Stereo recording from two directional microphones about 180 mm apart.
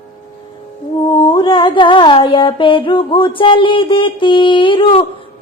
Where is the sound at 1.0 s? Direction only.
25° left (ahead or behind).